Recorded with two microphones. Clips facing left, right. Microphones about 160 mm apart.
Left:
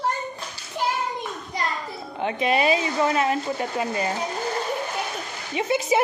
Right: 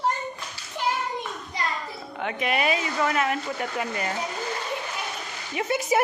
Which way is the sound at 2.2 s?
30° left (ahead or behind).